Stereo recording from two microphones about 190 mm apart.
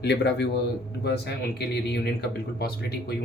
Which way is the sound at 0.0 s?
60° left (ahead or behind).